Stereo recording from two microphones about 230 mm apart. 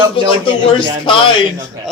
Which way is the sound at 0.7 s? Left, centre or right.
Left.